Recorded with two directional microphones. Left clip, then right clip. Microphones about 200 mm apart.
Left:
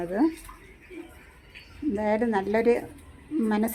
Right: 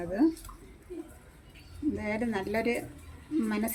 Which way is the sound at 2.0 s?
10° left (ahead or behind).